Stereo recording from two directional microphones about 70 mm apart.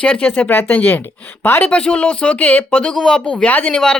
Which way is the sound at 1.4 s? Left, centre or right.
Left.